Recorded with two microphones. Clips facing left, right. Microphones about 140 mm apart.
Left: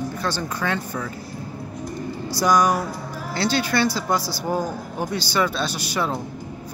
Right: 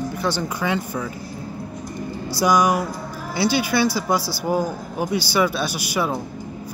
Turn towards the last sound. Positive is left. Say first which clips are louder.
# right 2 dB
turn(degrees=-10)  # may be behind; listen again after turning